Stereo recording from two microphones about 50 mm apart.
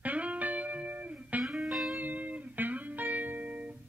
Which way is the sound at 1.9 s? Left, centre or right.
Right.